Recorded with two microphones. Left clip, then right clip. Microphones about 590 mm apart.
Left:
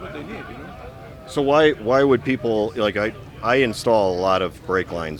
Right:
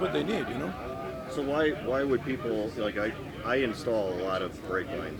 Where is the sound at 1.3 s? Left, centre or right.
Left.